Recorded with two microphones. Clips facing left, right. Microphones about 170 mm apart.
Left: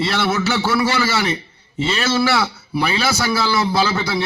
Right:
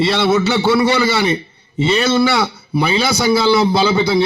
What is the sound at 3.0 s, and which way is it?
A man's voice, centre (ahead or behind).